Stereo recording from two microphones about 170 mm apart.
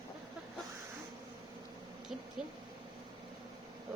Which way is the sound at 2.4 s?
5° right (ahead or behind).